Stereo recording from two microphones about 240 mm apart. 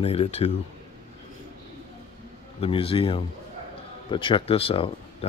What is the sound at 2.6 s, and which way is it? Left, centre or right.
Speech, left.